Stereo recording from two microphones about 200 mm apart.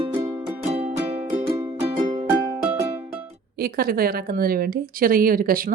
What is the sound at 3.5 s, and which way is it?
Speech, 50° right (ahead or behind).